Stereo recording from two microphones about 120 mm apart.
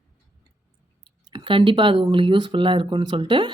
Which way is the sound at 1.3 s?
40° right (ahead or behind).